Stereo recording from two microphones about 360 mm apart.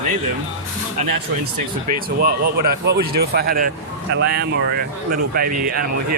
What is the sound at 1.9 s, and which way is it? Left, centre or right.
Speech, right.